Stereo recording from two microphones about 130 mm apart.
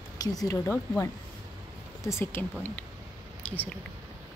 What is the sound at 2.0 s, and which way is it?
Speech, 20° left (ahead or behind).